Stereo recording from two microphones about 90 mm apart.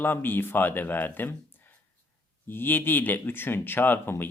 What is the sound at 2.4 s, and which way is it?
Speech, 25° left (ahead or behind).